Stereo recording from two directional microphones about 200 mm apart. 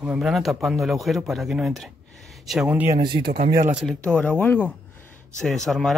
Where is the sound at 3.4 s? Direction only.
50° right (ahead or behind).